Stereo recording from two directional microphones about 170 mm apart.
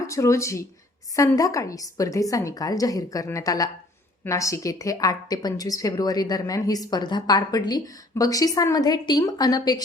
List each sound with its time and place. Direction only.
0.1 s a woman's voice: 20° left (ahead or behind)